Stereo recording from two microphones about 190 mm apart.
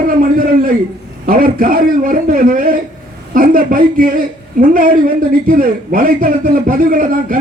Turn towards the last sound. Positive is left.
turn(degrees=-45)  # may be behind; listen again after turning